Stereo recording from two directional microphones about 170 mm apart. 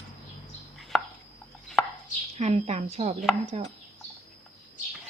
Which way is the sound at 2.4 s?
40° right (ahead or behind).